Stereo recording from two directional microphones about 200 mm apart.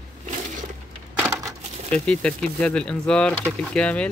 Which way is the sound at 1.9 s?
5° left (ahead or behind).